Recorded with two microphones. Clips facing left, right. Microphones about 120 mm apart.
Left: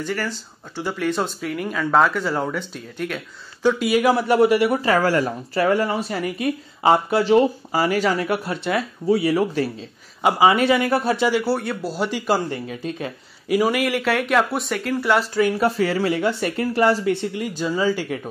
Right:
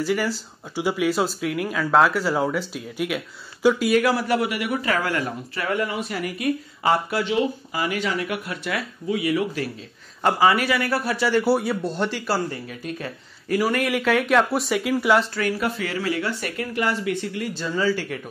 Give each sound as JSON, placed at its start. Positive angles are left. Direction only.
{"t": 0.0, "sound": "speech", "side_deg": -5}
{"t": 3.9, "sound": "speech", "side_deg": 20}
{"t": 7.2, "sound": "speech", "side_deg": 35}
{"t": 10.2, "sound": "speech", "side_deg": 20}
{"t": 11.4, "sound": "speech", "side_deg": -10}
{"t": 13.5, "sound": "speech", "side_deg": 15}
{"t": 13.8, "sound": "speech", "side_deg": 0}
{"t": 15.6, "sound": "speech", "side_deg": 30}